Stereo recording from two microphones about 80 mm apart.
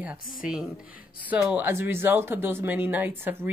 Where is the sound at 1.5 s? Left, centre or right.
Right.